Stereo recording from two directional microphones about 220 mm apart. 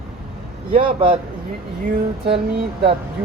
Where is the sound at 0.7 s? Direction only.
25° right (ahead or behind).